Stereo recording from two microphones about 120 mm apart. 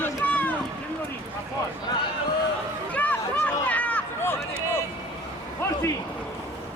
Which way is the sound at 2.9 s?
10° left (ahead or behind).